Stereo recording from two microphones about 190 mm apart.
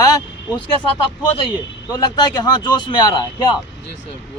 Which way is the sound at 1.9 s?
20° left (ahead or behind).